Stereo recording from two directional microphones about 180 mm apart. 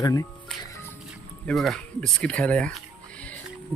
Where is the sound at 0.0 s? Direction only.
20° left (ahead or behind).